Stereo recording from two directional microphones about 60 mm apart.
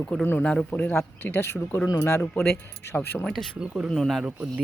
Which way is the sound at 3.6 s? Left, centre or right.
Centre.